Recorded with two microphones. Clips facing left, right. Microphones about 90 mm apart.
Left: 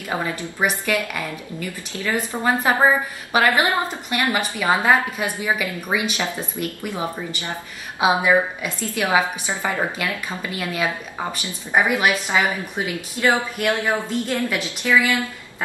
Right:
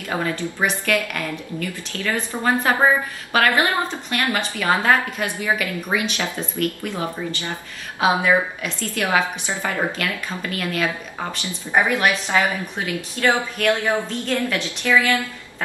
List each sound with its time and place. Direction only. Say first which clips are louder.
0.1 s a woman's voice: right 1 dB; 15° left (ahead or behind)